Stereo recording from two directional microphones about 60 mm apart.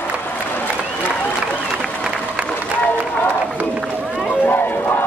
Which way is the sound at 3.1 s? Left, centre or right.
Left.